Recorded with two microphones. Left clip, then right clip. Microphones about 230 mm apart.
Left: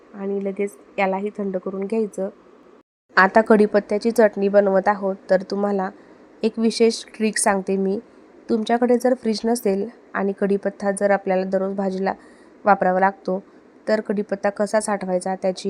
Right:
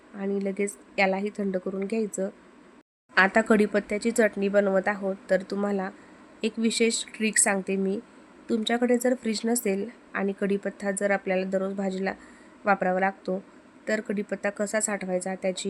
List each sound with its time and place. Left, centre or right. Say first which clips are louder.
0.2 s a woman's voice: left 4 dB; centre